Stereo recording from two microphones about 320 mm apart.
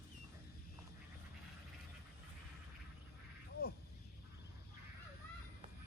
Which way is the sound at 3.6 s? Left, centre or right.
Left.